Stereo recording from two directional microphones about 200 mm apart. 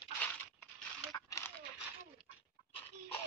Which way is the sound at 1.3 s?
15° left (ahead or behind).